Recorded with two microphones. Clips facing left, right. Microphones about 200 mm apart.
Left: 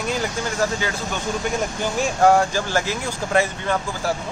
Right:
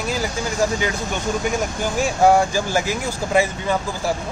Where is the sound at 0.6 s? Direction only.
15° right (ahead or behind).